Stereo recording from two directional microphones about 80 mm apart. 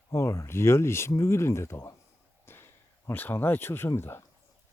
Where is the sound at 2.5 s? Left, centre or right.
Left.